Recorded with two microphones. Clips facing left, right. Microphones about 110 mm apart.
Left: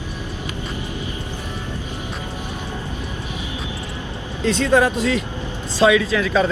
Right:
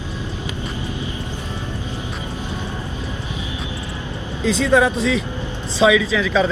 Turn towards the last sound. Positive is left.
turn(degrees=0)  # may be behind; listen again after turning